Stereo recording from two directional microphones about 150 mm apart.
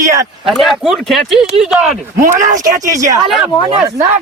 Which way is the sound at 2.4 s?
25° right (ahead or behind).